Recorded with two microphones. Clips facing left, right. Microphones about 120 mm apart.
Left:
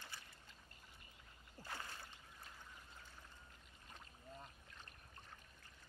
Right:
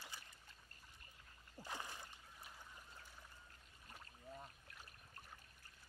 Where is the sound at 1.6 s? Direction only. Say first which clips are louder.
Right 1 dB; 15° right (ahead or behind).